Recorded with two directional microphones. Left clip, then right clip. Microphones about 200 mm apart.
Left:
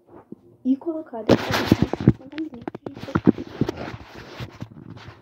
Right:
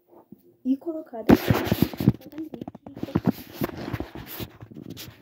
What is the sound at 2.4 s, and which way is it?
Speech, centre (ahead or behind).